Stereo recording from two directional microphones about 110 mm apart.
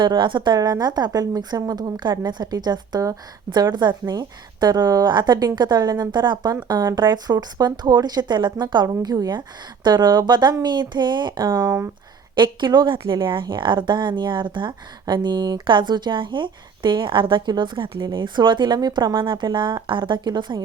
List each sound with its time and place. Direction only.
0.0 s a woman's voice: 45° right (ahead or behind)
11.5 s speech: 25° right (ahead or behind)
12.4 s a woman's voice: 45° right (ahead or behind)